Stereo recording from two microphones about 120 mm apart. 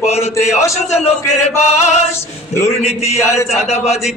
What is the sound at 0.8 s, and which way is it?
Speech, 75° left (ahead or behind).